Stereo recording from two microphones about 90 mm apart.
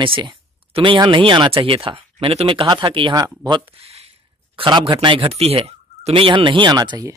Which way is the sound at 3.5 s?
80° right.